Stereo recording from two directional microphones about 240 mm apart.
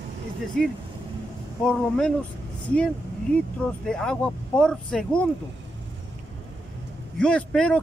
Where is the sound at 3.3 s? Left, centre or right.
Centre.